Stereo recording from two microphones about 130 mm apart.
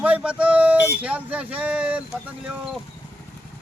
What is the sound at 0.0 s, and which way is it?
Speech, 10° right (ahead or behind).